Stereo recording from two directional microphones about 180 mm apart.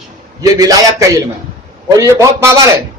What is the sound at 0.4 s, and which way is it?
A man's voice, 20° right (ahead or behind).